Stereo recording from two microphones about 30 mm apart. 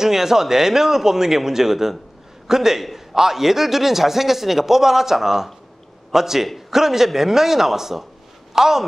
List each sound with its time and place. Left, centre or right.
0.0 s a man's voice: centre
2.8 s a man's voice: centre